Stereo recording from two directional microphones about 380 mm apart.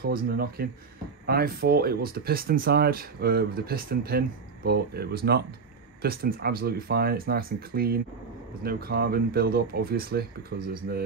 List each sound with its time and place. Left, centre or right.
0.0 s speech: right